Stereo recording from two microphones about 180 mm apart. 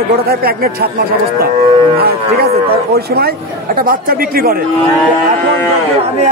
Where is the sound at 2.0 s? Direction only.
60° right (ahead or behind).